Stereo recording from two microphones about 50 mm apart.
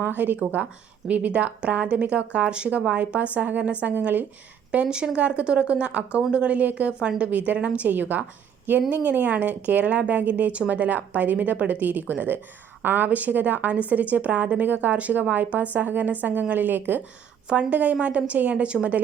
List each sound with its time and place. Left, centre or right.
0.2 s a woman's voice: right
4.7 s a woman's voice: right
17.5 s speech: right